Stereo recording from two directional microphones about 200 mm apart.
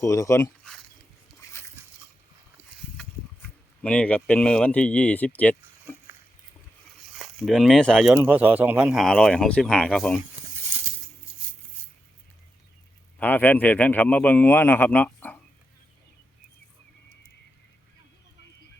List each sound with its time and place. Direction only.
0.0 s a man's voice: 15° left (ahead or behind)
3.0 s speech: 5° left (ahead or behind)
7.2 s speech: centre (ahead or behind)
8.1 s speech: 10° right (ahead or behind)
11.8 s cutlery: 10° left (ahead or behind)
13.1 s a man's voice: 10° left (ahead or behind)